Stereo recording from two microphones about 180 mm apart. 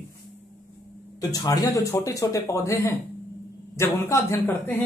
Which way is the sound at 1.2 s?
20° left (ahead or behind).